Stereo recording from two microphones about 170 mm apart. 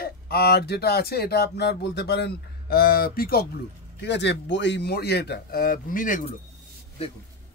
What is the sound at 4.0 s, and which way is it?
Speech, 90° left.